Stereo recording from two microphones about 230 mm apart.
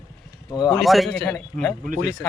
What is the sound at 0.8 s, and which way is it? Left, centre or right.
Speech, centre.